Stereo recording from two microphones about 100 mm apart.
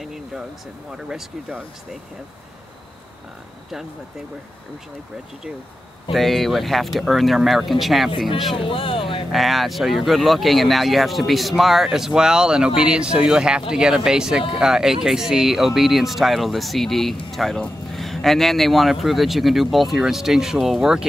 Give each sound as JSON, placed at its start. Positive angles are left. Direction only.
{"t": 0.0, "sound": "a sound", "side_deg": -5}
{"t": 0.9, "sound": "speech", "side_deg": -5}
{"t": 6.1, "sound": "speech", "side_deg": 0}
{"t": 8.5, "sound": "speech", "side_deg": 60}
{"t": 9.3, "sound": "speech", "side_deg": 0}